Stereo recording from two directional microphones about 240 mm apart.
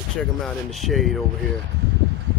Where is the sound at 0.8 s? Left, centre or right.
Centre.